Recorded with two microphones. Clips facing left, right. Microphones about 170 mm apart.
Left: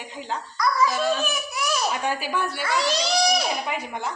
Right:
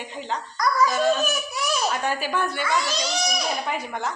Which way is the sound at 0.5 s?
45° right (ahead or behind).